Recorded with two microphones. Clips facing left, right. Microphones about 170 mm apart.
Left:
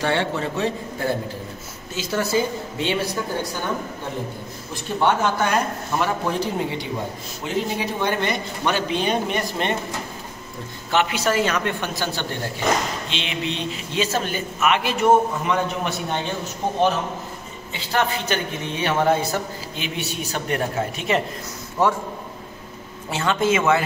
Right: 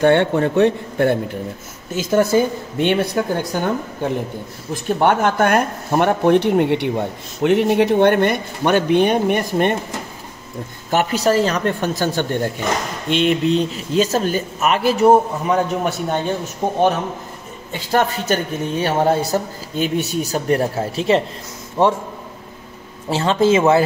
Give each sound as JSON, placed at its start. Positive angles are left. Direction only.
{"t": 0.0, "sound": "a man's voice", "side_deg": -55}
{"t": 2.0, "sound": "speech", "side_deg": -50}
{"t": 4.8, "sound": "a man's voice", "side_deg": -55}
{"t": 10.9, "sound": "speech", "side_deg": -40}
{"t": 17.7, "sound": "a man's voice", "side_deg": -45}
{"t": 23.0, "sound": "speech", "side_deg": -30}